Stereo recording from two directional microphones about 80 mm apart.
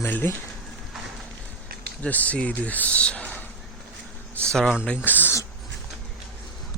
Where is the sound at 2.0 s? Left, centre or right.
Centre.